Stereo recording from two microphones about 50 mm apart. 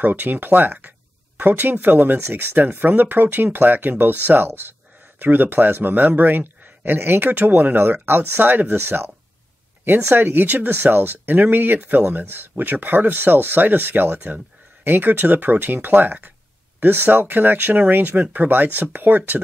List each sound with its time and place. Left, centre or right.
0.0 s a man's voice: right